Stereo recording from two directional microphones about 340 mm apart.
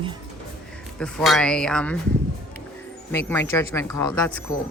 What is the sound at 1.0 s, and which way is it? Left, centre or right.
Speech, centre.